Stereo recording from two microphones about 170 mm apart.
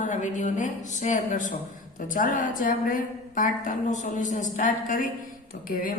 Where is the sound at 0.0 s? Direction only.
45° left (ahead or behind).